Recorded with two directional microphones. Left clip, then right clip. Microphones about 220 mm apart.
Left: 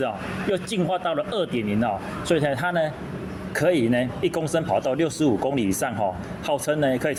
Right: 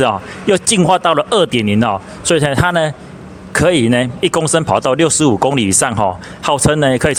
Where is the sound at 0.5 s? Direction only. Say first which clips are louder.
Right 14 dB; 45° right (ahead or behind).